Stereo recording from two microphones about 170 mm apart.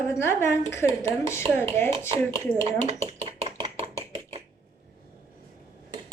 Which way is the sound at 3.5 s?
30° right (ahead or behind).